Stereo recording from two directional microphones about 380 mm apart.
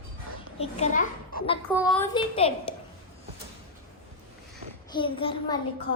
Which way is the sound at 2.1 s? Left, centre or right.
Centre.